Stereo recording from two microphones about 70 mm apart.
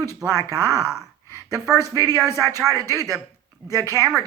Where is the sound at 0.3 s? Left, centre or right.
Left.